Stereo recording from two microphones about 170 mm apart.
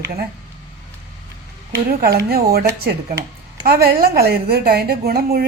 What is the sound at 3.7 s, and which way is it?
A woman's voice, 65° right (ahead or behind).